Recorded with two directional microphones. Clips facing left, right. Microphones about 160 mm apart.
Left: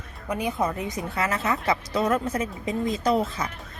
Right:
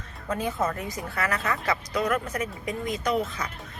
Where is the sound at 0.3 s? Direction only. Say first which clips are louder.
Left 1 dB; 15° left (ahead or behind).